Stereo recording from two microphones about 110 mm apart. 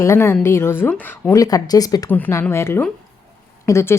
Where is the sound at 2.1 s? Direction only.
20° left (ahead or behind).